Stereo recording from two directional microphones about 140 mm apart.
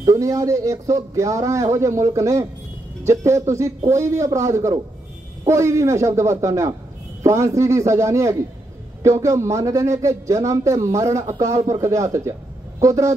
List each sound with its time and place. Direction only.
0.0 s a man's voice: 25° right (ahead or behind)